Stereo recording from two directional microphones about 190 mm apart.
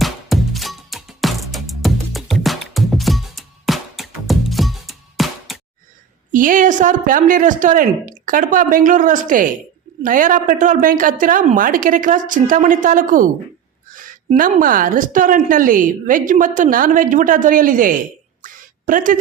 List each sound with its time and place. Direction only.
0.0 s music: centre (ahead or behind)
6.3 s a woman's voice: 45° right (ahead or behind)
18.4 s a sound: 45° right (ahead or behind)